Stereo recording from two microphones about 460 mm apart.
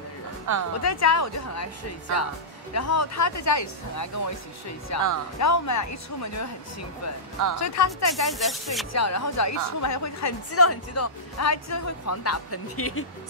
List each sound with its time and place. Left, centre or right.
0.5 s a woman's voice: right
0.8 s a woman's voice: left
7.5 s a woman's voice: left
8.1 s speech: centre
8.9 s a woman's voice: left